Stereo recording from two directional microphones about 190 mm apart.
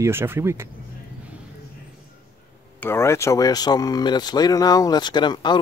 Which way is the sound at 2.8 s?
15° left (ahead or behind).